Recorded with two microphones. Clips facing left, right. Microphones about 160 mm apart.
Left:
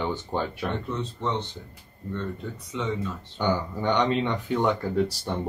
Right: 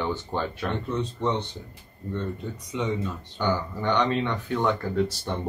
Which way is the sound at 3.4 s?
15° left (ahead or behind).